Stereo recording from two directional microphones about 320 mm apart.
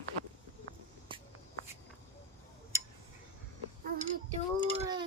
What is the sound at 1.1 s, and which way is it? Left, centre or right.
Shuffle, centre.